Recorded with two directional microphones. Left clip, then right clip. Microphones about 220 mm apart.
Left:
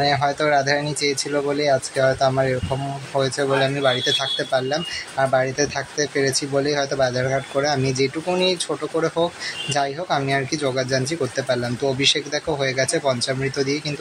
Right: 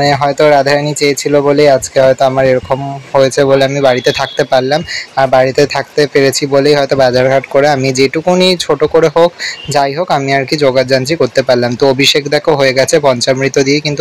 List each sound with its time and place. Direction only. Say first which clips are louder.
0.0 s speech: right 10 dB; 35° right (ahead or behind)